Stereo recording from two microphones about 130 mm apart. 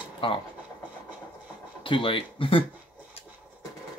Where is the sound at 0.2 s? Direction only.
40° left (ahead or behind).